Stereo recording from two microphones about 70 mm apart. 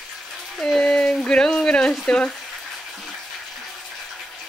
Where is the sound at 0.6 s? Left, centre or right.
Centre.